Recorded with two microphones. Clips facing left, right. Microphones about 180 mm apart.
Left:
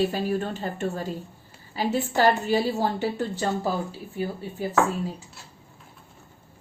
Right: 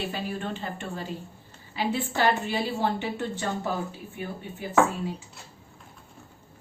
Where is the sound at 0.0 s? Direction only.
40° left (ahead or behind).